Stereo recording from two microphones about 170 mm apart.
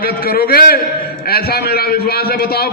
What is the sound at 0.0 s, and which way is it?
A man's voice, 60° left (ahead or behind).